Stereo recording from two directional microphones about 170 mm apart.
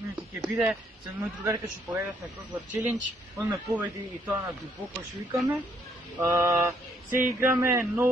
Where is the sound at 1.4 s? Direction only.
15° right (ahead or behind).